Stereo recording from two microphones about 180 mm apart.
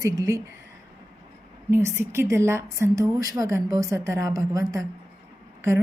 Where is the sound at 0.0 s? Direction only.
20° right (ahead or behind).